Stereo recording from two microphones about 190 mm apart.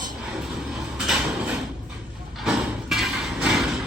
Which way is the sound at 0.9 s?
5° right (ahead or behind).